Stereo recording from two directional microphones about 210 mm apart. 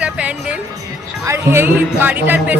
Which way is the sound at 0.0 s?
5° right (ahead or behind).